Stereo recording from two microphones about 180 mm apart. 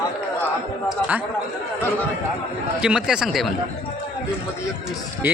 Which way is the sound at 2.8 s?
5° right (ahead or behind).